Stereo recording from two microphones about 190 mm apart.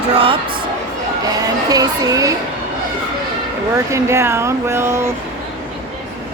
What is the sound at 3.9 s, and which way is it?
Speech, 15° right (ahead or behind).